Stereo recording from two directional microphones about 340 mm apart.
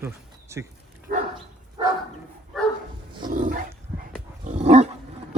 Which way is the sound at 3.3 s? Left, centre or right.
Right.